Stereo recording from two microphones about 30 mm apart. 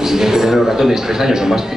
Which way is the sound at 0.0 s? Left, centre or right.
Centre.